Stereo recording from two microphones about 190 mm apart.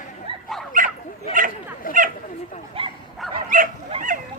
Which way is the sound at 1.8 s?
50° left (ahead or behind).